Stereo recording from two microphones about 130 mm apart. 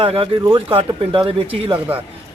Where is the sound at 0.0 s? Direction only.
40° right (ahead or behind).